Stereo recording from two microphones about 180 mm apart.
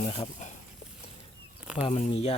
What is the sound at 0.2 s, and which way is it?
Speech, 40° left (ahead or behind).